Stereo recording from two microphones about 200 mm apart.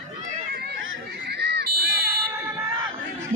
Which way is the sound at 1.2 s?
55° right (ahead or behind).